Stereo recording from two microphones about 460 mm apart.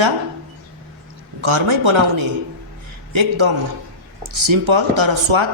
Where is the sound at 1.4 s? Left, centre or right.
Right.